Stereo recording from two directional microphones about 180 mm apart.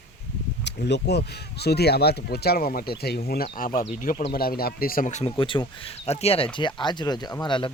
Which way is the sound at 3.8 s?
40° left (ahead or behind).